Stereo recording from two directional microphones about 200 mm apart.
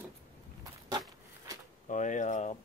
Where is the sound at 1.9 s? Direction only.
40° left (ahead or behind).